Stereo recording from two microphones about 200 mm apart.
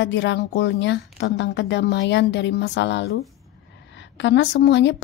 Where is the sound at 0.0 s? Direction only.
65° left (ahead or behind).